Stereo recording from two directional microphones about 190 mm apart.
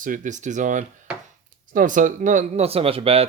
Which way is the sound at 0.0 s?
45° right (ahead or behind).